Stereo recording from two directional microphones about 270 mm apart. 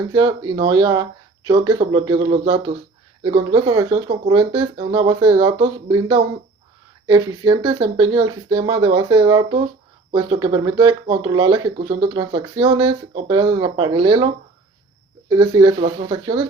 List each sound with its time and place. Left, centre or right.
0.1 s speech: centre
15.3 s speech: centre